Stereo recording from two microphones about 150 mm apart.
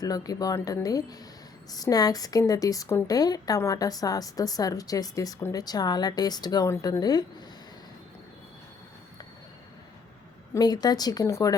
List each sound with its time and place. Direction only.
0.0 s speech: 25° left (ahead or behind)
10.5 s speech: 25° left (ahead or behind)